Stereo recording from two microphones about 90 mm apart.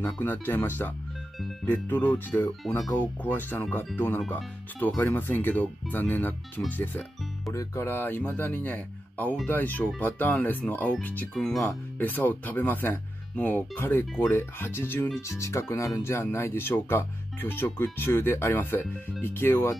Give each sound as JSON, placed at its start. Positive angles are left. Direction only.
{"t": 0.0, "sound": "speech", "side_deg": 20}
{"t": 11.3, "sound": "speech", "side_deg": 5}
{"t": 12.0, "sound": "speech", "side_deg": 20}